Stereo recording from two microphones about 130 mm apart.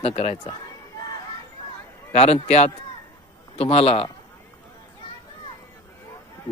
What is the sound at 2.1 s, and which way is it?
Speech, 55° left (ahead or behind).